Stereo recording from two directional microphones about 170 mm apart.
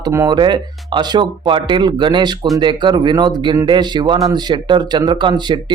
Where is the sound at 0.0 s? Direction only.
20° right (ahead or behind).